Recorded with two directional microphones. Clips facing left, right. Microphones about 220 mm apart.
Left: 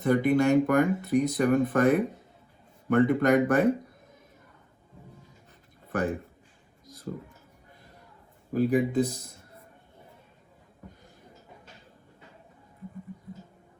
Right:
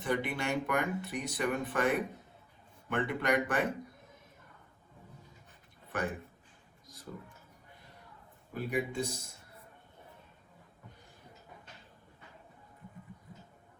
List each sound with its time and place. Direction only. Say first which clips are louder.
0.0 s speech: left 11 dB; 45° left (ahead or behind)
5.9 s a man's voice: left 7 dB; 40° left (ahead or behind)
8.5 s speech: left 10 dB; 40° left (ahead or behind)